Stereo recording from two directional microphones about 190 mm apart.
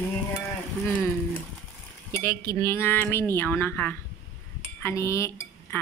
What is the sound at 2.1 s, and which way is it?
Speech, 15° left (ahead or behind).